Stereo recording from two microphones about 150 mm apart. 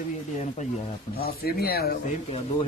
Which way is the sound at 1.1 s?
90° left.